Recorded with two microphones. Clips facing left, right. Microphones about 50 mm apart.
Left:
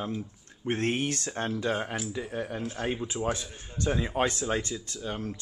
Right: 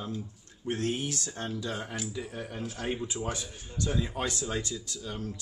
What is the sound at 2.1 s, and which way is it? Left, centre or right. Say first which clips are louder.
Speech: left 4 dB; left.